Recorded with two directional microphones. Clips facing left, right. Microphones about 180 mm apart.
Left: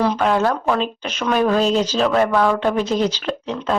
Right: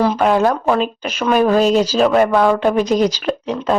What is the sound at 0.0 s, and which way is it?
Speech, 10° right (ahead or behind).